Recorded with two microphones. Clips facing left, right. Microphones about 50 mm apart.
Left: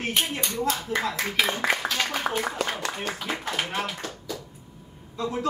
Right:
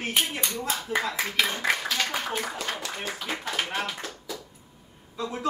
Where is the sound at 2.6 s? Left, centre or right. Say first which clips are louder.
Left 4 dB; left.